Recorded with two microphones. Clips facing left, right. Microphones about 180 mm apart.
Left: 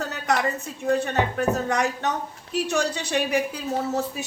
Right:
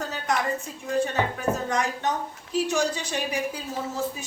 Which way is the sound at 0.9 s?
65° left (ahead or behind).